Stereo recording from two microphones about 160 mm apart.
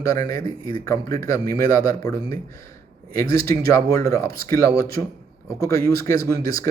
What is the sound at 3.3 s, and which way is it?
A man's voice, 20° left (ahead or behind).